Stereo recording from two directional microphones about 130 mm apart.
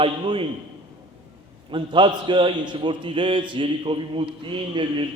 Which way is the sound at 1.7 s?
40° right (ahead or behind).